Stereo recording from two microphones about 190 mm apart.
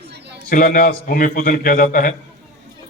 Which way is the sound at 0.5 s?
45° left (ahead or behind).